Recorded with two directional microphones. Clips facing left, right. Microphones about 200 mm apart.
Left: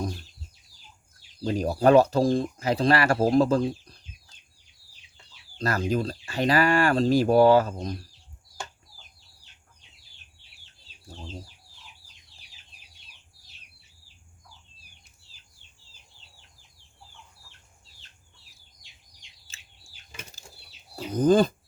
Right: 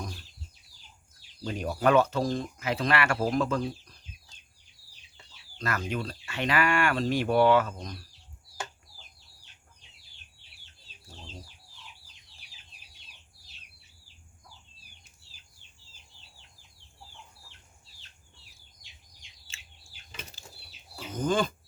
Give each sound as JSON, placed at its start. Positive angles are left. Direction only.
{"t": 1.5, "sound": "speech", "side_deg": 35}
{"t": 5.5, "sound": "speech", "side_deg": 35}
{"t": 20.9, "sound": "speech", "side_deg": 35}